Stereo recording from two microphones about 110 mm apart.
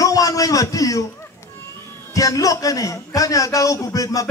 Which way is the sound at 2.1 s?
30° left (ahead or behind).